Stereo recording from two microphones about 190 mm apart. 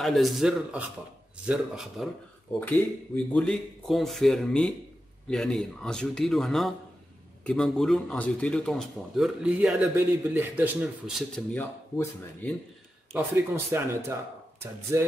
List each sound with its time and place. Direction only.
0.0 s a man's voice: centre (ahead or behind)
3.3 s a man's voice: 5° left (ahead or behind)
13.1 s speech: 15° right (ahead or behind)